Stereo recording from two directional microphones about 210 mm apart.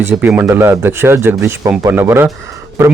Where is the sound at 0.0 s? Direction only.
10° right (ahead or behind).